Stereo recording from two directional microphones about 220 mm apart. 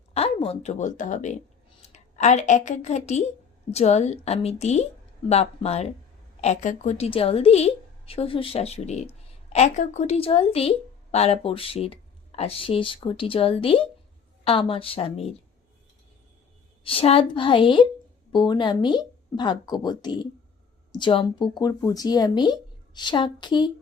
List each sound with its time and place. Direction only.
0.1 s a woman's voice: 25° left (ahead or behind)
16.8 s a woman's voice: 25° left (ahead or behind)